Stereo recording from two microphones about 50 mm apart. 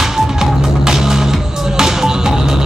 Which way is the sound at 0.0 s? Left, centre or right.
Centre.